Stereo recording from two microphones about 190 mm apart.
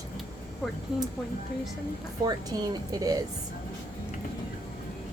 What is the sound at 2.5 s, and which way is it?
Speech, 20° right (ahead or behind).